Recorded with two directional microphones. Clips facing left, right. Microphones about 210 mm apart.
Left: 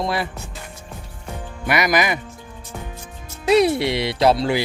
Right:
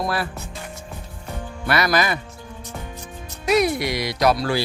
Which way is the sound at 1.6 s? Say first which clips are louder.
Left 1 dB; 15° left (ahead or behind).